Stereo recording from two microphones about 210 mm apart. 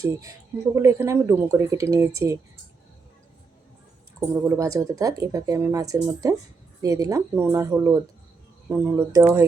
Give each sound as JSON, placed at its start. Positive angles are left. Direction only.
{"t": 0.0, "sound": "speech", "side_deg": -15}
{"t": 4.2, "sound": "speech", "side_deg": -15}